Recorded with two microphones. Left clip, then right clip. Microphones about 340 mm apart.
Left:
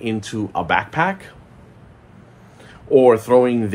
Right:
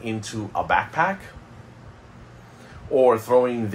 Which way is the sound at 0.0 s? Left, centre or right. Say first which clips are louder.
Left 6 dB; left.